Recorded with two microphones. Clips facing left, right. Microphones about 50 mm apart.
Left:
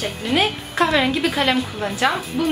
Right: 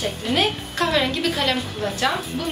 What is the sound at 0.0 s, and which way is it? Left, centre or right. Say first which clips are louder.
A woman's voice: left 1 dB; centre.